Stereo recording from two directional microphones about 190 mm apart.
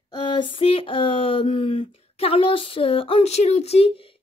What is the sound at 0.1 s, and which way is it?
Speech, 25° left (ahead or behind).